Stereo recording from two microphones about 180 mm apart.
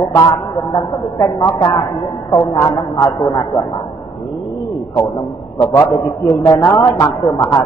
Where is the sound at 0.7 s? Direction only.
20° left (ahead or behind).